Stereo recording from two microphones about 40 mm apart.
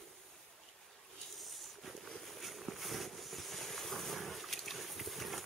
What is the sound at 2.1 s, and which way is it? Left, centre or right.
Boat, centre.